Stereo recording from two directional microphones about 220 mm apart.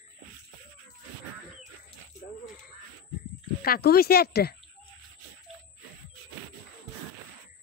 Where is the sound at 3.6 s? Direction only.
45° left (ahead or behind).